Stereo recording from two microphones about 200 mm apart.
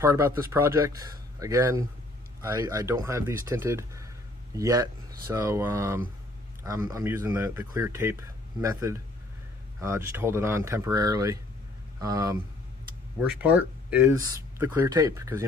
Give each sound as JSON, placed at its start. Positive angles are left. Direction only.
{"t": 0.0, "sound": "speech", "side_deg": -15}
{"t": 13.2, "sound": "speech", "side_deg": -5}